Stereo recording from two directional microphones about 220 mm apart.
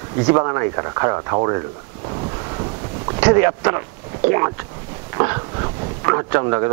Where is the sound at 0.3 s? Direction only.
20° right (ahead or behind).